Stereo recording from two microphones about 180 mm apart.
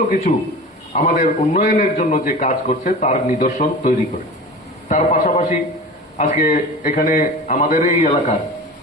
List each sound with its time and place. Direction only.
0.3 s a man's voice: 35° left (ahead or behind)